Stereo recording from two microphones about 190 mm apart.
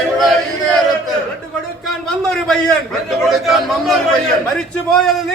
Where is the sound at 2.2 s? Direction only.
Centre (ahead or behind).